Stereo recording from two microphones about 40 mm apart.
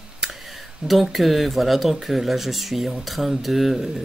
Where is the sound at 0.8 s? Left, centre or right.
Centre.